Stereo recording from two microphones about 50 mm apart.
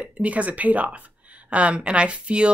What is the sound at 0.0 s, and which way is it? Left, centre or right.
Speech, right.